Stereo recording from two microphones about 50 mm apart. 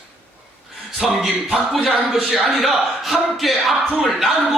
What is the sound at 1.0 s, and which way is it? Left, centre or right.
Speech, centre.